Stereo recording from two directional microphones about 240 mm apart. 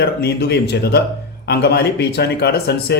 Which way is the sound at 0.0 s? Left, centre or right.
Left.